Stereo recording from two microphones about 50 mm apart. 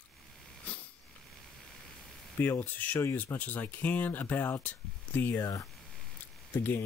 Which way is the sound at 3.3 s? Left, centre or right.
Left.